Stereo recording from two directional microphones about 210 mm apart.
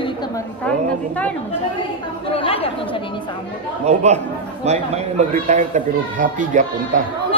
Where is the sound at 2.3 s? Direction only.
25° left (ahead or behind).